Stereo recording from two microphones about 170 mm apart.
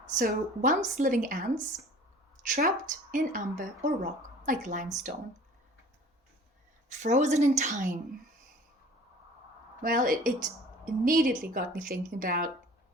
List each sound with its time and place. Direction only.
0.2 s speech: 50° right (ahead or behind)
6.9 s speech: 45° right (ahead or behind)
9.8 s speech: 55° right (ahead or behind)